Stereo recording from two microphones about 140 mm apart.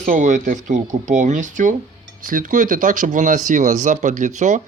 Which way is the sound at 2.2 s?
75° right (ahead or behind).